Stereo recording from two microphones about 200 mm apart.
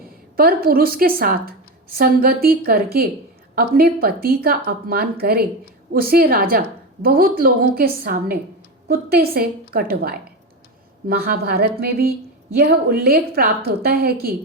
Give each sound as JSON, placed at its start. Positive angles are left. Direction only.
{"t": 0.0, "sound": "a woman's voice", "side_deg": -45}